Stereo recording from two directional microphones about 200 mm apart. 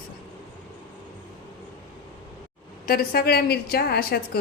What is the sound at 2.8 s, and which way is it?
A woman's voice, 50° left (ahead or behind).